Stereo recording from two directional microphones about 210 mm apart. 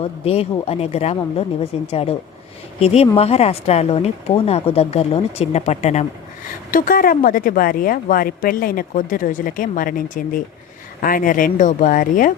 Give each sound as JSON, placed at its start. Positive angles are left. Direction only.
{"t": 0.0, "sound": "a woman's voice", "side_deg": 30}